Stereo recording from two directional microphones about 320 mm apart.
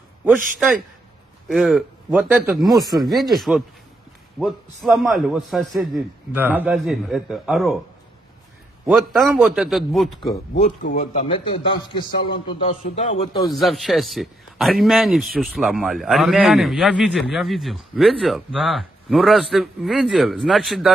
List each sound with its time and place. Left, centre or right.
0.2 s speech: centre
8.9 s speech: centre
10.5 s a man's voice: left
13.6 s speech: centre